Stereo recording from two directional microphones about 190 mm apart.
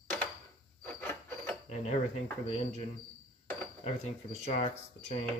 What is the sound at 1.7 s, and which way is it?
Speech, 35° left (ahead or behind).